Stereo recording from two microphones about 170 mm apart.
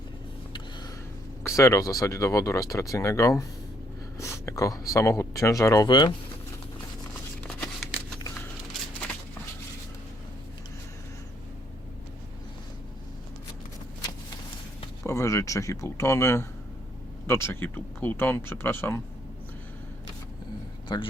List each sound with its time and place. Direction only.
1.5 s speech: 20° left (ahead or behind)
7.4 s a sound: centre (ahead or behind)
15.0 s speech: 15° left (ahead or behind)
20.8 s a man's voice: 25° left (ahead or behind)